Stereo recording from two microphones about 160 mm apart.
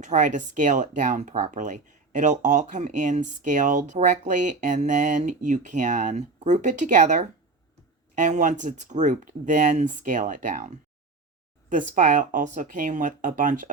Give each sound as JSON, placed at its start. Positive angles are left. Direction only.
{"t": 0.0, "sound": "speech", "side_deg": -50}
{"t": 11.7, "sound": "speech", "side_deg": -55}